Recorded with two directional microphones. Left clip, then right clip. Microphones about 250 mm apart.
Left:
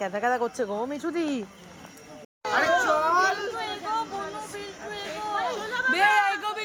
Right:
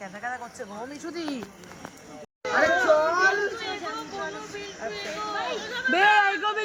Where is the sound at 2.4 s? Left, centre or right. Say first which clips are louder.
Right 1 dB; centre.